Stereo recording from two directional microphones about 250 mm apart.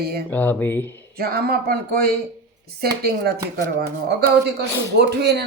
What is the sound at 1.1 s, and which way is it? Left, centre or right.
Speech, right.